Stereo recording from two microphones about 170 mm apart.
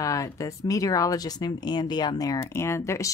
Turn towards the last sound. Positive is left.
turn(degrees=15)  # may be behind; listen again after turning